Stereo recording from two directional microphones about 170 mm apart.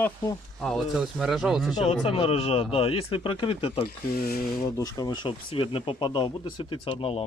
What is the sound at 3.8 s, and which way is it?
Speech, 65° left (ahead or behind).